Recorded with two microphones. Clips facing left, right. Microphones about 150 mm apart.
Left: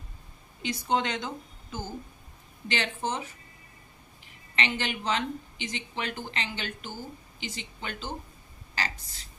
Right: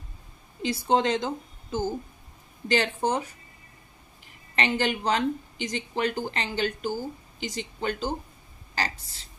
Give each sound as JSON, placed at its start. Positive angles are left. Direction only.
{"t": 0.6, "sound": "a woman's voice", "side_deg": -35}
{"t": 4.6, "sound": "a woman's voice", "side_deg": -40}